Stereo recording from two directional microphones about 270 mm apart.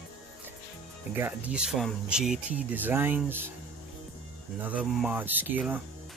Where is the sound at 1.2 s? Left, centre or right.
Centre.